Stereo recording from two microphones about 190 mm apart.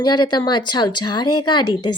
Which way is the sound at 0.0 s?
20° left (ahead or behind).